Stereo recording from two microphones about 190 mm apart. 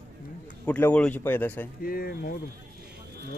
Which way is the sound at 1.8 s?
55° left (ahead or behind).